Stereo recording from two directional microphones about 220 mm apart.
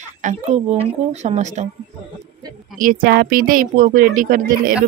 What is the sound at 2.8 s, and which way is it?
Speech, 40° right (ahead or behind).